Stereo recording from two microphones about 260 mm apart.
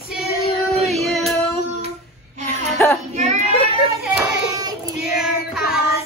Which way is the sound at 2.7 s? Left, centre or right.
Centre.